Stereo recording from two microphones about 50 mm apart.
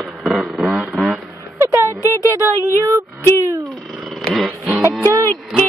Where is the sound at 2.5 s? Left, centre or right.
Right.